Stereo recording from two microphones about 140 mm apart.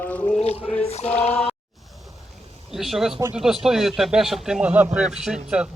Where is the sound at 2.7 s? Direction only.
Centre (ahead or behind).